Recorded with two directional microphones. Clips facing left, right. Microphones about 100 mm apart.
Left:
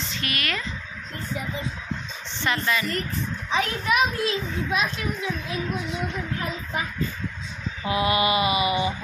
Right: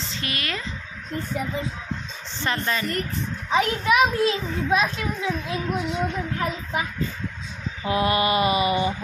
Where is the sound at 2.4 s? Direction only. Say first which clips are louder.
Left 1 dB; 35° right (ahead or behind).